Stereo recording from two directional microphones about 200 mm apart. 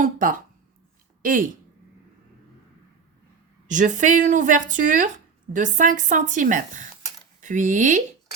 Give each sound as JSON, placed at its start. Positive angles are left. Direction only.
{"t": 0.0, "sound": "speech", "side_deg": -45}
{"t": 3.7, "sound": "speech", "side_deg": -40}